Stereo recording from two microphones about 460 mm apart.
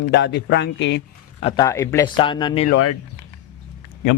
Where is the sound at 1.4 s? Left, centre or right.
Centre.